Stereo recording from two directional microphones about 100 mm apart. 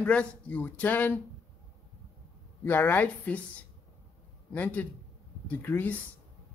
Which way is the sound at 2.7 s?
20° left (ahead or behind).